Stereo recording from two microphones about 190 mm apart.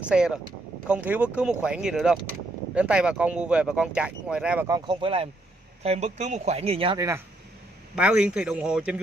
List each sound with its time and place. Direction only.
0.0 s speech: 5° right (ahead or behind)
4.6 s speech: 20° right (ahead or behind)
7.9 s speech: 5° right (ahead or behind)